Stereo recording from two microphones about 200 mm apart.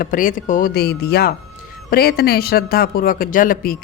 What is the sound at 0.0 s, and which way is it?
Speech, 40° left (ahead or behind).